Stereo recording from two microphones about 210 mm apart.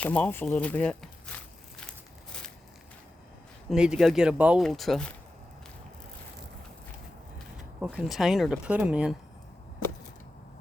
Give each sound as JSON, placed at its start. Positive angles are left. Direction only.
{"t": 0.0, "sound": "speech", "side_deg": 5}
{"t": 1.9, "sound": "crumpling", "side_deg": 5}
{"t": 3.7, "sound": "speech", "side_deg": -5}
{"t": 7.8, "sound": "speech", "side_deg": -5}